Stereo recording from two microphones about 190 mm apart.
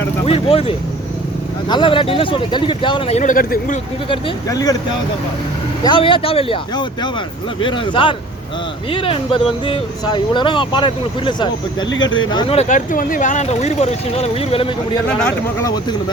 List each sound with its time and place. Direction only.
0.3 s speech: 30° left (ahead or behind)
3.2 s speech: 45° left (ahead or behind)
4.1 s speech: 20° left (ahead or behind)
5.8 s speech: 25° left (ahead or behind)